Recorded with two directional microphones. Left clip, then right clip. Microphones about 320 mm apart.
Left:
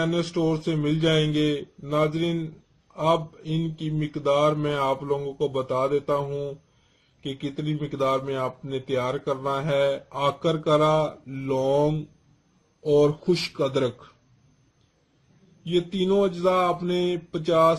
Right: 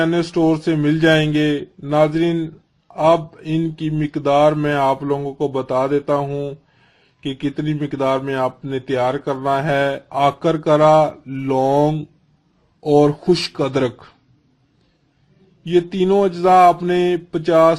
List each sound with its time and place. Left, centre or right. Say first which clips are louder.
0.0 s speech: right 8 dB; right
15.7 s speech: right 7 dB; right